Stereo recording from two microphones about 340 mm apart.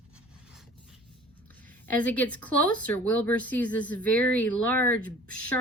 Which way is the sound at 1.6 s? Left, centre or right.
Centre.